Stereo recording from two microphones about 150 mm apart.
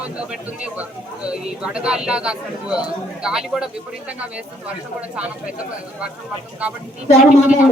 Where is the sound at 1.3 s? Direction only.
5° right (ahead or behind).